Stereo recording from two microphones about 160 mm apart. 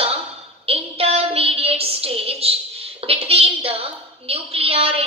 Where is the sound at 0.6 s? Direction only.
40° right (ahead or behind).